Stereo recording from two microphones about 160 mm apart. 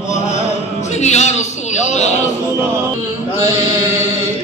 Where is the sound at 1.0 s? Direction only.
45° left (ahead or behind).